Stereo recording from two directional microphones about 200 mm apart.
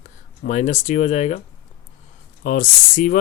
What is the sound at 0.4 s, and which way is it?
Speech, 40° left (ahead or behind).